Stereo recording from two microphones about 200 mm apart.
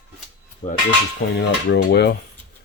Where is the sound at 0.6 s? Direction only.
25° left (ahead or behind).